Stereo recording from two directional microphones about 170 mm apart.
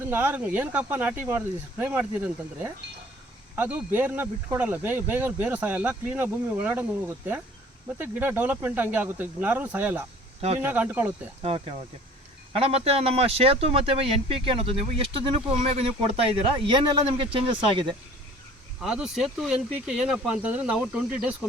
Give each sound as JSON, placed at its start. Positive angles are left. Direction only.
{"t": 0.0, "sound": "speech", "side_deg": -10}
{"t": 7.9, "sound": "speech", "side_deg": -10}
{"t": 11.4, "sound": "speech", "side_deg": -35}
{"t": 18.8, "sound": "speech", "side_deg": -5}